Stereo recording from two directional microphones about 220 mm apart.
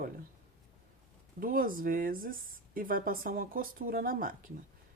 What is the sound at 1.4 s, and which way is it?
Speech, 40° right (ahead or behind).